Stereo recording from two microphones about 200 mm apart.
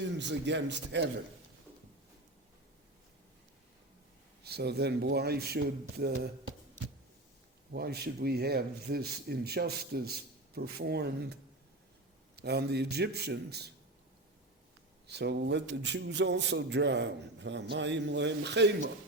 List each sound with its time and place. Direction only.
0.0 s a man's voice: 60° right (ahead or behind)
4.4 s speech: 55° right (ahead or behind)
7.7 s speech: 50° right (ahead or behind)
12.4 s a man's voice: 55° right (ahead or behind)
15.0 s a man's voice: 55° right (ahead or behind)